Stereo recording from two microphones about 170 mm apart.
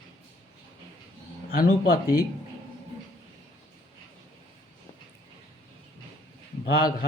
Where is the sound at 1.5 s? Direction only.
60° left (ahead or behind).